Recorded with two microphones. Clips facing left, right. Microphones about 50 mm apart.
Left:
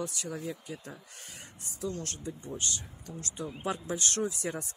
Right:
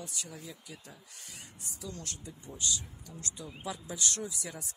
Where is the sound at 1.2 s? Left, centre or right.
Left.